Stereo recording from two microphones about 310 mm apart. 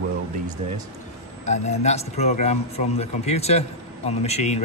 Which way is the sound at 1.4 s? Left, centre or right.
Left.